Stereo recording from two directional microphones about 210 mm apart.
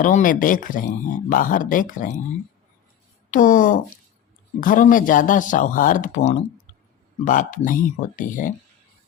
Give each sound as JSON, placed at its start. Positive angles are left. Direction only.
{"t": 0.0, "sound": "speech", "side_deg": 40}
{"t": 3.3, "sound": "speech", "side_deg": 40}